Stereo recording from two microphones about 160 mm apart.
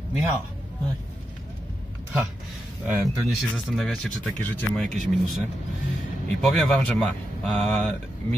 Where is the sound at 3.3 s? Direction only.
Centre (ahead or behind).